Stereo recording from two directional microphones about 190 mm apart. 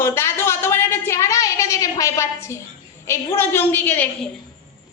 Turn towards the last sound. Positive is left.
turn(degrees=10)  # may be behind; listen again after turning